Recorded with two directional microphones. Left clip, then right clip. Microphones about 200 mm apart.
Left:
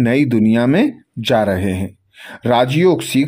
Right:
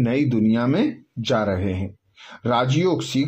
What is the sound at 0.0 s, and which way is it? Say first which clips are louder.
Speech: left 6 dB; 30° left (ahead or behind).